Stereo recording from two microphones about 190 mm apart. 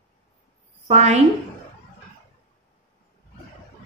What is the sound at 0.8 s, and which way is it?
Speech, 35° right (ahead or behind).